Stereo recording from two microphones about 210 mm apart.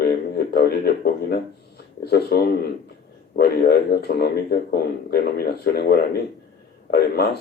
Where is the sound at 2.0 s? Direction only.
50° left (ahead or behind).